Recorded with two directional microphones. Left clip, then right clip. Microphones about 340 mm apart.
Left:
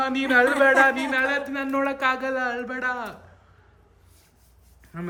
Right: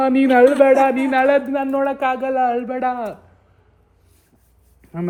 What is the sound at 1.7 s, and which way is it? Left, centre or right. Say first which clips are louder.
Speech: right 3 dB; centre.